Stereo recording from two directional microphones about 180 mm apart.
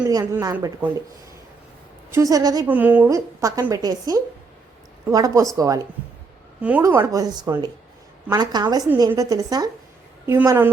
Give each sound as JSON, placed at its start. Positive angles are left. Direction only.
{"t": 0.1, "sound": "a woman's voice", "side_deg": -20}
{"t": 2.0, "sound": "a woman's voice", "side_deg": -15}
{"t": 2.6, "sound": "a woman's voice", "side_deg": -10}
{"t": 6.6, "sound": "a woman's voice", "side_deg": -5}